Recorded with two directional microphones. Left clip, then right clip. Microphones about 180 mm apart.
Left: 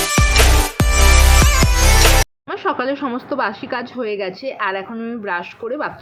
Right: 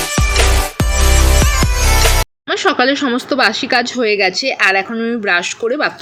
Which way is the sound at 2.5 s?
25° right (ahead or behind).